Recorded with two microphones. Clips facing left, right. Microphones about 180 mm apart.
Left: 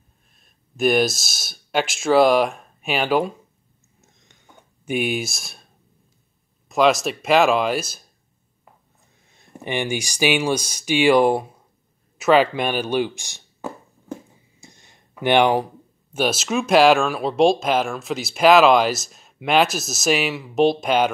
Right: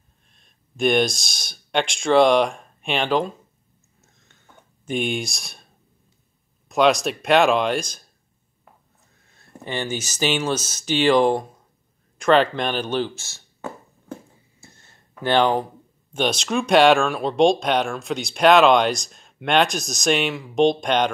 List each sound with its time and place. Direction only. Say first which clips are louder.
0.3 s speech: even; 5° left (ahead or behind)
4.0 s a sound: left 2 dB; 15° left (ahead or behind)
4.6 s speech: left 2 dB; 5° left (ahead or behind)
6.7 s speech: even; centre (ahead or behind)
9.3 s speech: left 3 dB; 15° left (ahead or behind)
14.6 s speech: left 2 dB; 15° left (ahead or behind)